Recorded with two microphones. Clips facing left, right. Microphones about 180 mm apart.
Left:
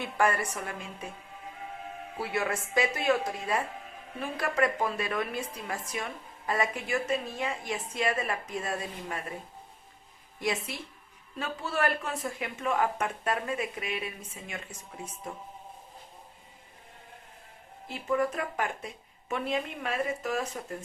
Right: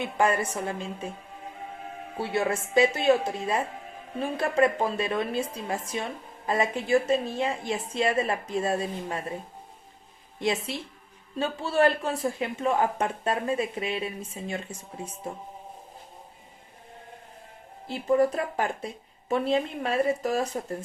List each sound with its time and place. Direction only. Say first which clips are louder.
0.0 s a woman's voice: right 3 dB; 20° right (ahead or behind)
2.1 s a woman's voice: right 4 dB; 30° right (ahead or behind)
10.4 s a woman's voice: right 4 dB; 25° right (ahead or behind)
17.8 s speech: right 6 dB; 35° right (ahead or behind)